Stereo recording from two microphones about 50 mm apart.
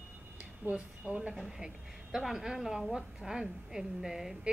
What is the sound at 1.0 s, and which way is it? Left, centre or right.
Speech, right.